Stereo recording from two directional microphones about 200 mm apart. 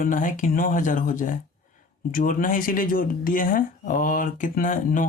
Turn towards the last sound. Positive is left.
turn(degrees=40)  # may be behind; listen again after turning